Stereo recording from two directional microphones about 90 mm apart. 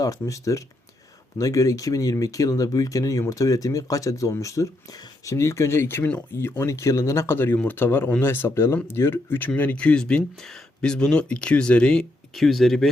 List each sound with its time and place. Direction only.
0.0 s speech: 35° left (ahead or behind)
9.6 s speech: 15° left (ahead or behind)